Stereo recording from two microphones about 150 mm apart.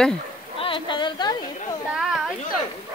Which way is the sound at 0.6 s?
35° left (ahead or behind).